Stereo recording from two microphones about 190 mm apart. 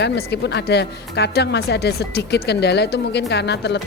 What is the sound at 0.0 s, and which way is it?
A woman's voice, 60° left (ahead or behind).